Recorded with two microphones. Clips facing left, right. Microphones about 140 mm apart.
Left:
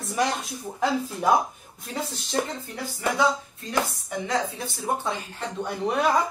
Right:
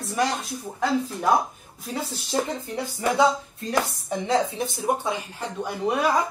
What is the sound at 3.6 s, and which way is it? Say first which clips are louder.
Speech: right 2 dB; 35° right (ahead or behind).